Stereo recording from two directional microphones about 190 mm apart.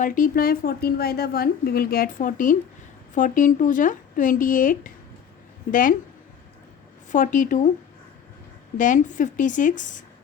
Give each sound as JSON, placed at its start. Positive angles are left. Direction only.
{"t": 0.0, "sound": "a woman's voice", "side_deg": 45}
{"t": 7.1, "sound": "a woman's voice", "side_deg": 40}
{"t": 8.8, "sound": "a woman's voice", "side_deg": 40}